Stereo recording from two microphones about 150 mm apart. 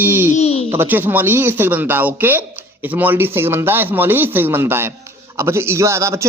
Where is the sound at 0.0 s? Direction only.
15° right (ahead or behind).